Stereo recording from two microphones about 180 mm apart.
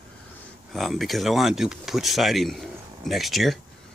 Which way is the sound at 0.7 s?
Centre (ahead or behind).